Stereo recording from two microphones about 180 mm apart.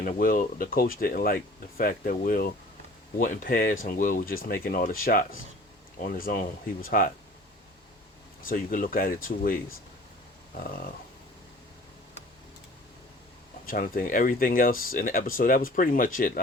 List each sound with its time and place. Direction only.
0.0 s speech: 50° left (ahead or behind)
8.4 s speech: 50° left (ahead or behind)
13.7 s speech: 50° left (ahead or behind)